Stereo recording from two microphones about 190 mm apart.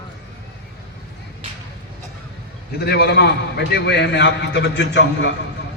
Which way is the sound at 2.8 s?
55° left (ahead or behind).